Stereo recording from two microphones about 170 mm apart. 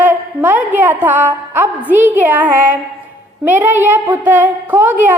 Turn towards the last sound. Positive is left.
turn(degrees=-10)  # may be behind; listen again after turning